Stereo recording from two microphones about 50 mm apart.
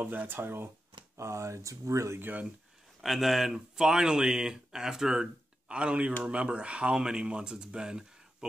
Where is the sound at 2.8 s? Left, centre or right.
Centre.